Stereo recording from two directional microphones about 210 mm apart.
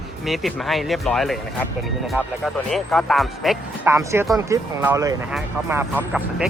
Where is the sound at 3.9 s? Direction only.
10° right (ahead or behind).